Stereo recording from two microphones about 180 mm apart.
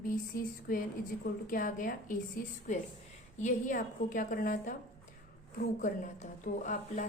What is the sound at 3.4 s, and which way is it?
A woman's voice, 45° left (ahead or behind).